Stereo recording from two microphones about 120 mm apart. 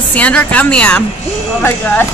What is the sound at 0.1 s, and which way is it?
Speech, 10° left (ahead or behind).